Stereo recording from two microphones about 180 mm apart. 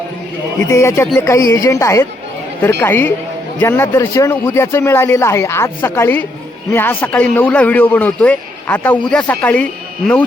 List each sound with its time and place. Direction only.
0.7 s a man's voice: 15° left (ahead or behind)